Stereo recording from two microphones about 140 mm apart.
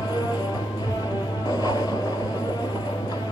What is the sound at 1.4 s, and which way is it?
Music, 25° left (ahead or behind).